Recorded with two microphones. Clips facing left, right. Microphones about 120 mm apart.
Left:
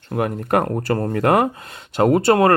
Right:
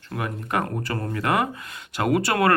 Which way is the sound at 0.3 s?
50° left (ahead or behind).